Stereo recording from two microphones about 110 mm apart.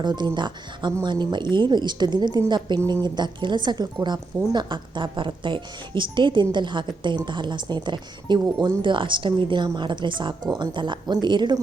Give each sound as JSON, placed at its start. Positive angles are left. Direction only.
{"t": 0.0, "sound": "a woman's voice", "side_deg": -40}